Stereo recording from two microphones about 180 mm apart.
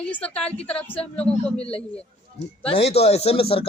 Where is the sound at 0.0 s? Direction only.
5° left (ahead or behind).